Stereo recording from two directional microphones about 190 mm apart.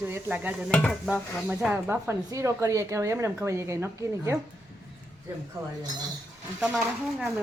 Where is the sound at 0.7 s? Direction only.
10° left (ahead or behind).